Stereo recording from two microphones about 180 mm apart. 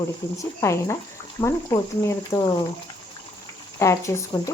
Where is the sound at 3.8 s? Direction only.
15° left (ahead or behind).